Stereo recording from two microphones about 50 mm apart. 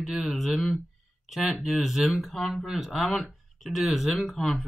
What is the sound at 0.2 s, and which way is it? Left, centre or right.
Speech, centre.